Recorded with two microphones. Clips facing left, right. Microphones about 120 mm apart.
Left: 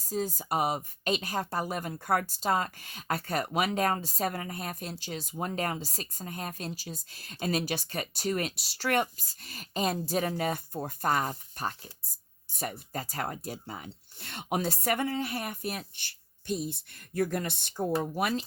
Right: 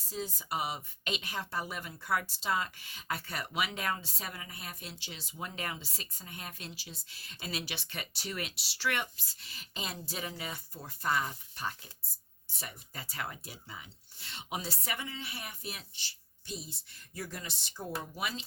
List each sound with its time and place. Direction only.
0.1 s a woman's voice: 45° left (ahead or behind)
12.5 s a sound: 50° left (ahead or behind)
12.9 s a woman's voice: 45° left (ahead or behind)